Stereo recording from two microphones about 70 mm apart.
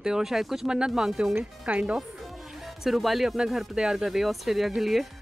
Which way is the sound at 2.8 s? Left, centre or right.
Centre.